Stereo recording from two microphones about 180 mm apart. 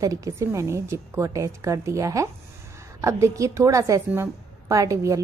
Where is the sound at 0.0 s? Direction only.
15° right (ahead or behind).